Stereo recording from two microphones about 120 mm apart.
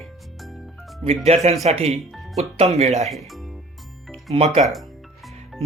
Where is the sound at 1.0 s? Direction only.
60° right (ahead or behind).